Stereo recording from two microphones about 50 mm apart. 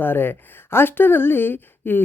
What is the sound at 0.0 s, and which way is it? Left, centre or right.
Speech, left.